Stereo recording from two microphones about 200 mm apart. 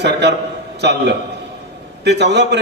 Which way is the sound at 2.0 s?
60° right (ahead or behind).